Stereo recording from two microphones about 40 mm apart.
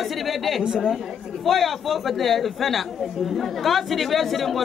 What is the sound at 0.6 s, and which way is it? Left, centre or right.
Speech, right.